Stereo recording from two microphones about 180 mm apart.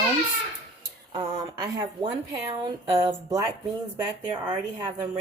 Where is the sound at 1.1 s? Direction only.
20° right (ahead or behind).